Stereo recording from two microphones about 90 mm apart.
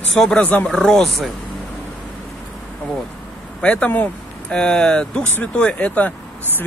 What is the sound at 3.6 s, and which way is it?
Speech, 15° left (ahead or behind).